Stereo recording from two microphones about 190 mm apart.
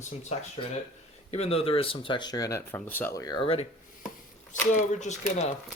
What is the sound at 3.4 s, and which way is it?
Speech, 30° left (ahead or behind).